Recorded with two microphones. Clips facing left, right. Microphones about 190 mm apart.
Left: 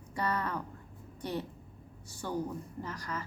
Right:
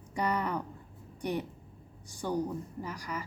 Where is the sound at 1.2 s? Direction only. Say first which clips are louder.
Right 3 dB; 15° right (ahead or behind).